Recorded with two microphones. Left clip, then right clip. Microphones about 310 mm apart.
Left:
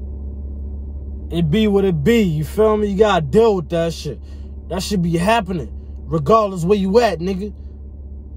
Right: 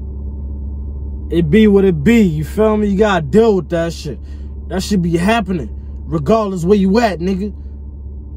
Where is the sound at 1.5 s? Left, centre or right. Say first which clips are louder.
Right 5 dB; centre.